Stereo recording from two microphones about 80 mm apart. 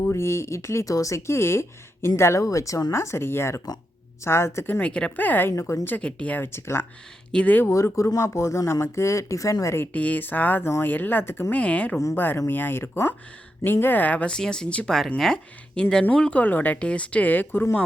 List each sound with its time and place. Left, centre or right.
0.0 s speech: left
4.8 s speech: centre
5.5 s speech: left
6.0 s speech: centre
6.5 s speech: left
7.3 s speech: left
7.9 s speech: left
9.7 s speech: left
10.6 s speech: left
11.5 s speech: centre
12.1 s speech: left